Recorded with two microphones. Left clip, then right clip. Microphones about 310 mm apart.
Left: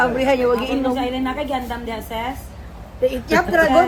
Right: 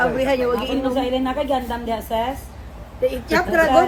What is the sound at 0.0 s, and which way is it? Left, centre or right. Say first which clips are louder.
Speech: left 2 dB; left.